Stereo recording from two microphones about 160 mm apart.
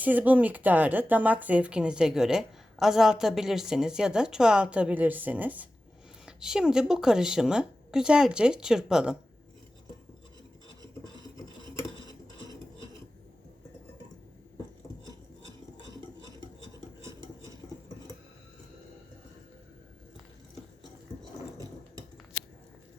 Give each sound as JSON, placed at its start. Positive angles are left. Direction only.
{"t": 0.0, "sound": "a woman's voice", "side_deg": -10}